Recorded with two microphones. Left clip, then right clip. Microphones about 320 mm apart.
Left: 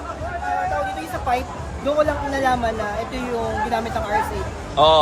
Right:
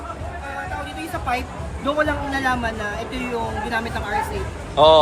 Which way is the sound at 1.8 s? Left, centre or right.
Centre.